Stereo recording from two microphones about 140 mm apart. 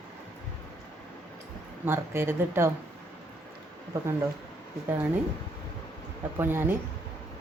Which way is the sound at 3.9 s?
20° right (ahead or behind).